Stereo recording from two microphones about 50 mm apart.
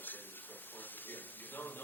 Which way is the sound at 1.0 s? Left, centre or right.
Left.